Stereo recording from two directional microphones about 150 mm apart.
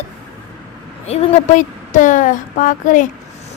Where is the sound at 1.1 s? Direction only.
50° left (ahead or behind).